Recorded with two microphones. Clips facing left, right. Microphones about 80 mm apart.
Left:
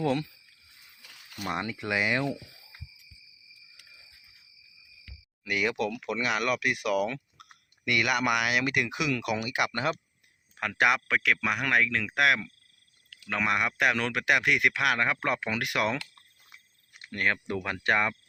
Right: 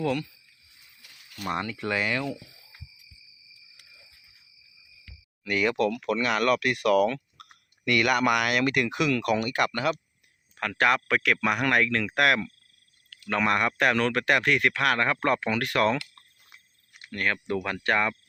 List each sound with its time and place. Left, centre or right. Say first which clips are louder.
0.0 s speech: even; left
1.4 s speech: right 2 dB; centre
5.5 s speech: right 4 dB; centre
9.7 s speech: right 2 dB; left
10.6 s speech: right 2 dB; centre
17.1 s speech: right 1 dB; left